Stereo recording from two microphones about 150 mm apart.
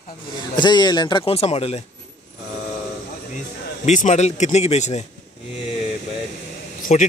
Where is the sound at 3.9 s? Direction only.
55° left (ahead or behind).